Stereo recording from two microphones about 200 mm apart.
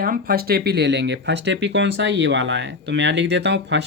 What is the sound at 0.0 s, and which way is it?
Speech, 45° right (ahead or behind).